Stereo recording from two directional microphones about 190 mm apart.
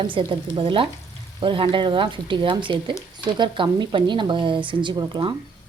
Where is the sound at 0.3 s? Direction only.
25° right (ahead or behind).